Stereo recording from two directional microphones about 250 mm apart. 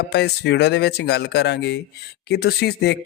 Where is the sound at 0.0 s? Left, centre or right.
Left.